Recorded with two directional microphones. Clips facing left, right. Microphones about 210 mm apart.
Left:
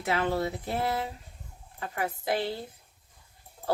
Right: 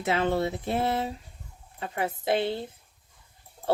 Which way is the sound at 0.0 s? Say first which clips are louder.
Right 2 dB; 25° right (ahead or behind).